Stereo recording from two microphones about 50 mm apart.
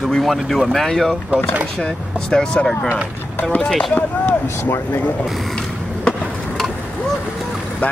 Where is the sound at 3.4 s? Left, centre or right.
Left.